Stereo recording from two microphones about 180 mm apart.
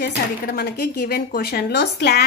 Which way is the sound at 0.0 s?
60° left (ahead or behind).